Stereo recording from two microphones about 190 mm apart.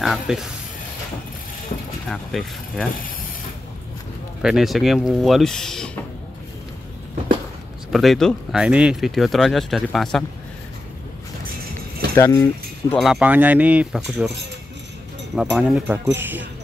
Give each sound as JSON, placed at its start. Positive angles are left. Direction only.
{"t": 0.0, "sound": "speech", "side_deg": 0}
{"t": 2.0, "sound": "speech", "side_deg": 5}
{"t": 4.4, "sound": "speech", "side_deg": -5}
{"t": 7.9, "sound": "speech", "side_deg": 0}
{"t": 12.2, "sound": "speech", "side_deg": 15}
{"t": 12.9, "sound": "speech", "side_deg": 0}
{"t": 15.3, "sound": "speech", "side_deg": 0}